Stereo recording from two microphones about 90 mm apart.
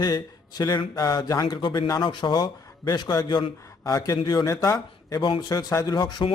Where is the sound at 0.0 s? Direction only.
45° left (ahead or behind).